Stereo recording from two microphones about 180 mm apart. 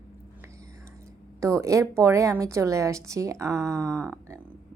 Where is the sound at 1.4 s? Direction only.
15° right (ahead or behind).